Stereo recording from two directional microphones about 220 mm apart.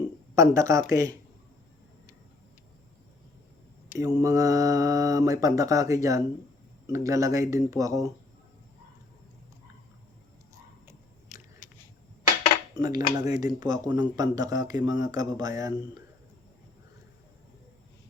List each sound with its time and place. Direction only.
0.3 s speech: 15° right (ahead or behind)
3.8 s speech: 15° right (ahead or behind)
11.6 s chop: 35° left (ahead or behind)
12.7 s cutlery: 20° right (ahead or behind)
13.1 s speech: 20° right (ahead or behind)